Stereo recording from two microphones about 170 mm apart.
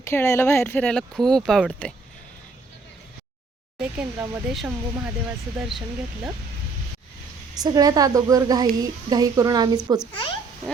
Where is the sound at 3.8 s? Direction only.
5° right (ahead or behind).